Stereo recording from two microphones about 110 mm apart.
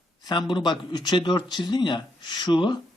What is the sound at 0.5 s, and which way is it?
A man's voice, 40° left (ahead or behind).